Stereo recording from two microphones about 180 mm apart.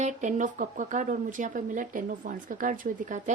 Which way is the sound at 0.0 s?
40° right (ahead or behind).